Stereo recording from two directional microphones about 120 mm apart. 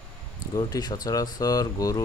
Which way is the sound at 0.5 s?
35° left (ahead or behind).